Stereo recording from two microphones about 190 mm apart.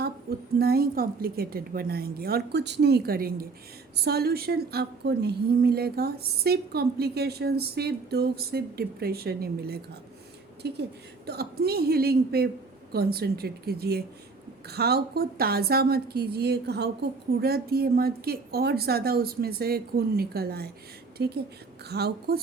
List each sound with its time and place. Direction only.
0.0 s a woman's voice: 55° right (ahead or behind)